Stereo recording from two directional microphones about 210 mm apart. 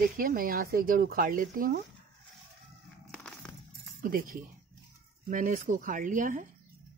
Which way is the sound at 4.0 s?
40° right (ahead or behind).